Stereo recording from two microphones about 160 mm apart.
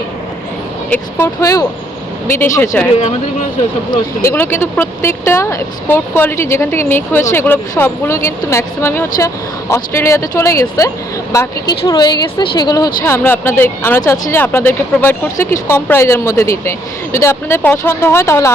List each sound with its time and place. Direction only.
0.9 s speech: 10° left (ahead or behind)
4.2 s speech: 15° left (ahead or behind)